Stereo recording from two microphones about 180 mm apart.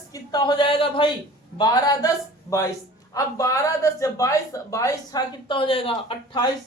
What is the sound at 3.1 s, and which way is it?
Speech, 20° left (ahead or behind).